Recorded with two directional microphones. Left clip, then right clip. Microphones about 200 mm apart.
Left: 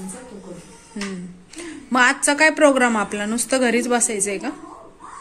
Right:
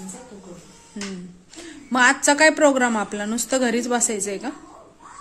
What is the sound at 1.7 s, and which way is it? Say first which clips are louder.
A woman's voice: left 1 dB; 15° right (ahead or behind).